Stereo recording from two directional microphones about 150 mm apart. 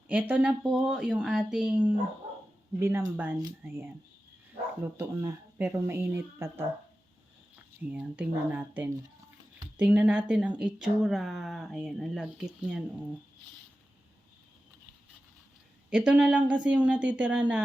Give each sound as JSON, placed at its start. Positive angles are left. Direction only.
{"t": 0.1, "sound": "speech", "side_deg": -10}
{"t": 4.9, "sound": "speech", "side_deg": -15}
{"t": 15.9, "sound": "speech", "side_deg": -5}